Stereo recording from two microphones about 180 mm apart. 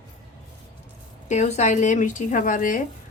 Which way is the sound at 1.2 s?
40° left (ahead or behind).